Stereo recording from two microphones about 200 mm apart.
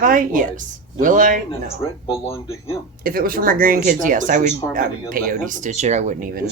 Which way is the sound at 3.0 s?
45° right (ahead or behind).